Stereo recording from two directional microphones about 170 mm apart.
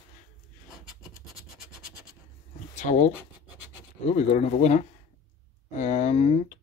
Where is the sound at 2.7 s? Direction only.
45° left (ahead or behind).